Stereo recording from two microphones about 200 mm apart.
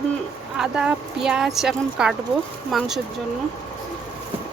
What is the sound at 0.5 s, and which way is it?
Speech, 5° right (ahead or behind).